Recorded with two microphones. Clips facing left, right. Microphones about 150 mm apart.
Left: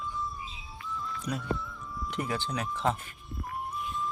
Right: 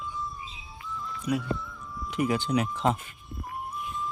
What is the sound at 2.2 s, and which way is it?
Speech, 15° right (ahead or behind).